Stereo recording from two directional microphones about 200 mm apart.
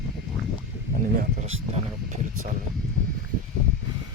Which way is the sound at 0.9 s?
40° right (ahead or behind).